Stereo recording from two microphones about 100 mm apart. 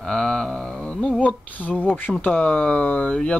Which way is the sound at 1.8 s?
20° left (ahead or behind).